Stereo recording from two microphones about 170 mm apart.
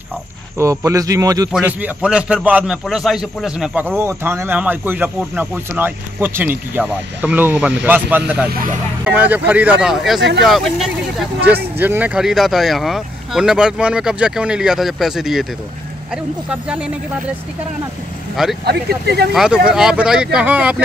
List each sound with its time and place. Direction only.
0.6 s a man's voice: 20° right (ahead or behind)
1.5 s a man's voice: 10° right (ahead or behind)
16.4 s speech: 5° right (ahead or behind)
18.3 s speech: centre (ahead or behind)
18.7 s speech: 75° right (ahead or behind)
19.3 s speech: 5° right (ahead or behind)